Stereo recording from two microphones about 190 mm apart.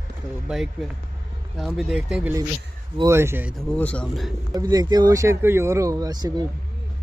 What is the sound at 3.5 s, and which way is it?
Speech, 10° left (ahead or behind).